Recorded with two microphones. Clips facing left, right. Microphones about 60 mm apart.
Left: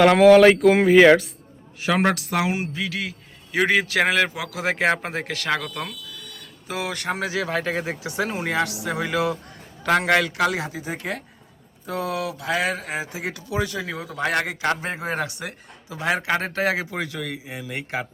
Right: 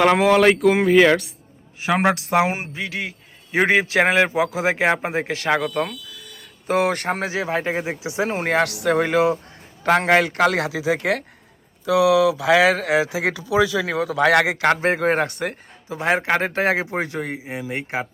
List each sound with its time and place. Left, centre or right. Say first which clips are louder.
0.0 s speech: left 3 dB; centre
1.8 s a man's voice: right 2 dB; right
6.7 s a man's voice: right 7 dB; right
8.3 s a man's voice: right 6 dB; right
9.1 s a man's voice: right 5 dB; right
10.5 s speech: right 7 dB; right
13.7 s a man's voice: right 8 dB; right
15.9 s a man's voice: right 3 dB; right